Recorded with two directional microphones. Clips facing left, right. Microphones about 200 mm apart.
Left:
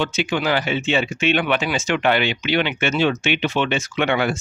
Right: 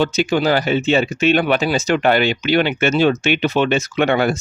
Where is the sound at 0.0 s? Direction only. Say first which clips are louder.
Right 5 dB; 40° right (ahead or behind).